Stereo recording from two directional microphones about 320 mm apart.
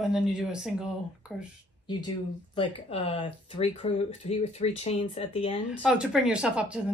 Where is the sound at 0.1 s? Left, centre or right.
Centre.